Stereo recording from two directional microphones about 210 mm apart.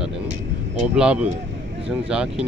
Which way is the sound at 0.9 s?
5° right (ahead or behind).